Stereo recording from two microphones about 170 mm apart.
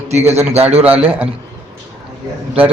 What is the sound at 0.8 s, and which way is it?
Speech, 10° right (ahead or behind).